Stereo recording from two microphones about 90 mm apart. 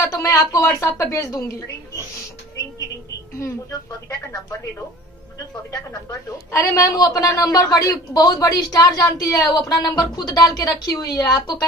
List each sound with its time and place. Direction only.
0.1 s a woman's voice: 35° left (ahead or behind)
6.5 s a woman's voice: 35° left (ahead or behind)